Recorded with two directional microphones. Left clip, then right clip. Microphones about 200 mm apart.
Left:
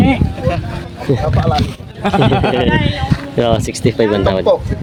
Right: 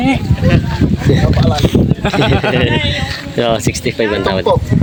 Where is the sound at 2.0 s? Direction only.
60° left (ahead or behind).